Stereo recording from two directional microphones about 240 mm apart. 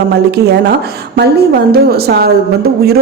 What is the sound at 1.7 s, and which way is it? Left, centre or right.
Speech, right.